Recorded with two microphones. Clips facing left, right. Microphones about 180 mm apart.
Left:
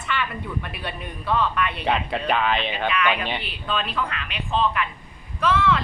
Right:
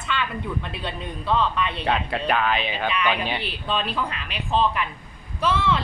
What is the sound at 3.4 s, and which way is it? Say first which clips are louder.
A woman's voice: right 1 dB; 35° right (ahead or behind).